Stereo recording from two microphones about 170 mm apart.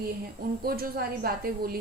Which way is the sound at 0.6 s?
60° right (ahead or behind).